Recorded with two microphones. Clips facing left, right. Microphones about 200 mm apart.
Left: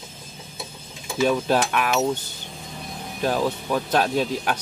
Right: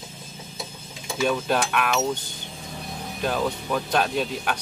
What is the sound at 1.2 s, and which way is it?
Speech, 5° left (ahead or behind).